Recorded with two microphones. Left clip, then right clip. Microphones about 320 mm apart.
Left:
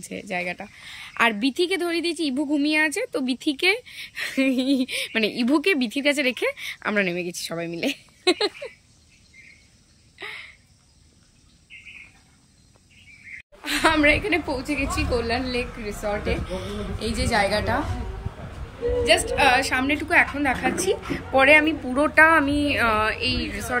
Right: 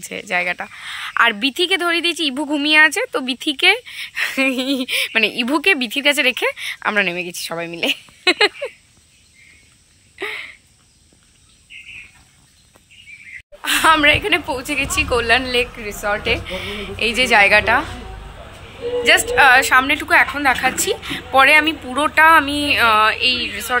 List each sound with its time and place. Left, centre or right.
0.0 s speech: centre
13.6 s a woman's voice: centre
17.3 s a woman's voice: centre
19.3 s speech: centre